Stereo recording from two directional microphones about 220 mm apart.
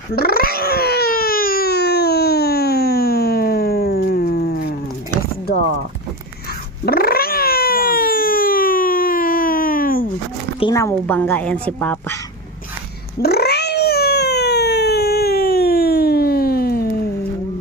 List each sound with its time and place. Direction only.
0.2 s baby cry: 45° left (ahead or behind)
6.8 s cat: 45° left (ahead or behind)
10.6 s a woman's voice: 15° left (ahead or behind)
13.2 s cat: 45° left (ahead or behind)